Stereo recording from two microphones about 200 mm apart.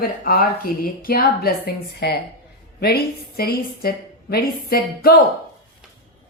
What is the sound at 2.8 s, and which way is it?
Speech, 50° left (ahead or behind).